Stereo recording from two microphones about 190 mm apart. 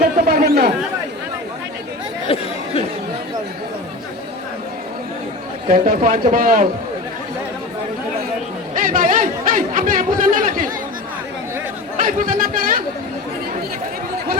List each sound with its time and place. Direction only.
0.0 s chatter: 50° right (ahead or behind)
5.6 s a man's voice: 45° right (ahead or behind)
8.7 s chatter: 45° right (ahead or behind)
11.9 s chatter: 45° right (ahead or behind)